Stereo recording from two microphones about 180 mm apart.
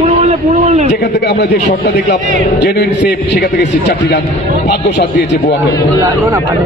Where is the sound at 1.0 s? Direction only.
65° left (ahead or behind).